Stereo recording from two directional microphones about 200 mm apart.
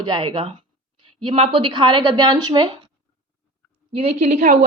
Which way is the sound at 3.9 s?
30° right (ahead or behind).